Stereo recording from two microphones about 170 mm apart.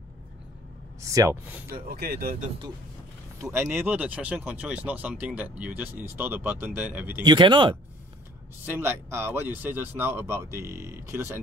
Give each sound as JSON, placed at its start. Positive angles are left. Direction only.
{"t": 1.0, "sound": "speech", "side_deg": -20}
{"t": 2.0, "sound": "speech", "side_deg": -65}
{"t": 3.7, "sound": "speech", "side_deg": -10}
{"t": 7.2, "sound": "speech", "side_deg": -25}
{"t": 8.6, "sound": "speech", "side_deg": -15}